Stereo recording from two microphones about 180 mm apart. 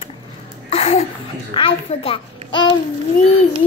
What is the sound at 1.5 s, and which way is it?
A child's voice, 30° left (ahead or behind).